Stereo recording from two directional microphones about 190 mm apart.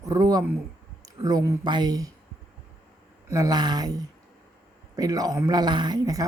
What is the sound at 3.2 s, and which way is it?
Speech, 15° right (ahead or behind).